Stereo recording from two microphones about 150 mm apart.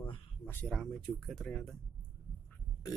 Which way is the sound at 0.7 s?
5° left (ahead or behind).